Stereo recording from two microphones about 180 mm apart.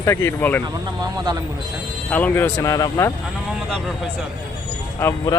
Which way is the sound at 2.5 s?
20° left (ahead or behind).